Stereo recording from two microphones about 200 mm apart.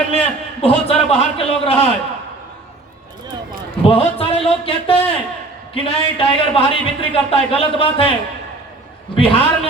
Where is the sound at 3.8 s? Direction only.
30° left (ahead or behind).